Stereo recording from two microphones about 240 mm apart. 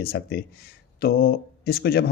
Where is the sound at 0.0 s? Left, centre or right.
Left.